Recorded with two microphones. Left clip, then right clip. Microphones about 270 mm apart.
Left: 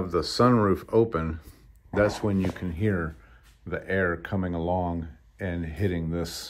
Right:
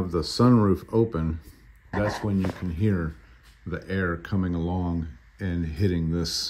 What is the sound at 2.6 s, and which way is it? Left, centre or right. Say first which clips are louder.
Speech: even; centre.